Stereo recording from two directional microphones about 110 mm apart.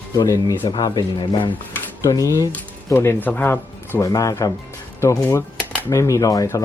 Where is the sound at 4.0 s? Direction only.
30° left (ahead or behind).